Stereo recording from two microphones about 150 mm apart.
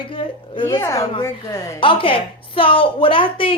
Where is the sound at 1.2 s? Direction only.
20° left (ahead or behind).